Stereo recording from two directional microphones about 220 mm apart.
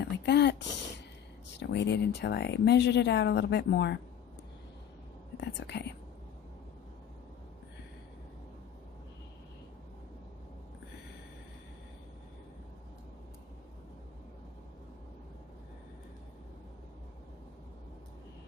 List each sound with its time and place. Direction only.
0.0 s speech: 50° left (ahead or behind)
1.5 s speech: 50° left (ahead or behind)
5.4 s speech: 50° left (ahead or behind)